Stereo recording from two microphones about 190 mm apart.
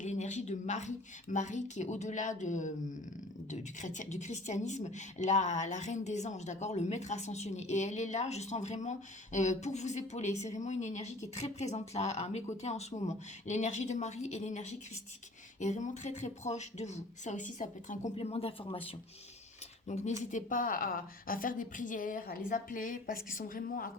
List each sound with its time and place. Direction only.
0.0 s speech: 40° left (ahead or behind)
19.9 s a woman's voice: 40° left (ahead or behind)